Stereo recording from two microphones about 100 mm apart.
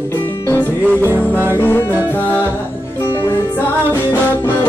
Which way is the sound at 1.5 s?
20° left (ahead or behind).